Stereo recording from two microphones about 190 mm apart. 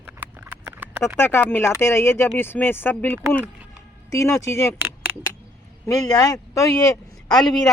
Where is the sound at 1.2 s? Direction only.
10° left (ahead or behind).